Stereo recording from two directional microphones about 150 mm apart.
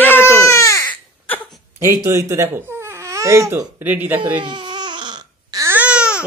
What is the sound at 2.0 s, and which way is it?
Speech, 15° right (ahead or behind).